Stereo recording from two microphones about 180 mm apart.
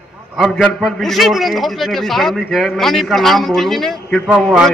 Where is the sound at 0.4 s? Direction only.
Centre (ahead or behind).